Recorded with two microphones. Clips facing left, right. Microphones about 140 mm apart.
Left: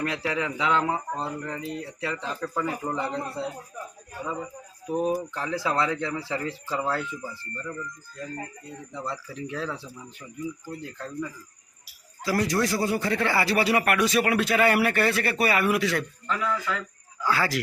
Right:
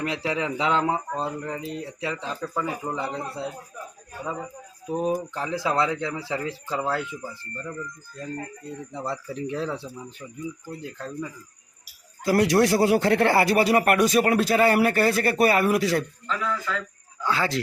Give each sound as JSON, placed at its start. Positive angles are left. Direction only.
{"t": 0.0, "sound": "speech", "side_deg": -20}
{"t": 4.9, "sound": "speech", "side_deg": 5}
{"t": 5.3, "sound": "speech", "side_deg": -15}
{"t": 9.0, "sound": "speech", "side_deg": -35}
{"t": 9.6, "sound": "speech", "side_deg": -20}
{"t": 12.2, "sound": "speech", "side_deg": -60}
{"t": 16.2, "sound": "speech", "side_deg": 10}
{"t": 17.2, "sound": "speech", "side_deg": -20}